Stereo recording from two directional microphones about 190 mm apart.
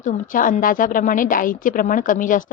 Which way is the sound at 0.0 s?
45° left (ahead or behind).